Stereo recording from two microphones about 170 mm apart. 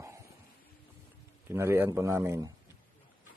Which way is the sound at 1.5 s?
15° right (ahead or behind).